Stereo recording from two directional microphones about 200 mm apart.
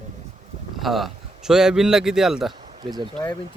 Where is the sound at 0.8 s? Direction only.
Centre (ahead or behind).